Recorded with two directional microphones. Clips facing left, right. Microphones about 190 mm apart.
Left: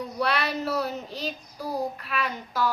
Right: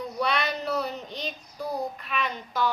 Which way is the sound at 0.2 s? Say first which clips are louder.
Left 1 dB; centre (ahead or behind).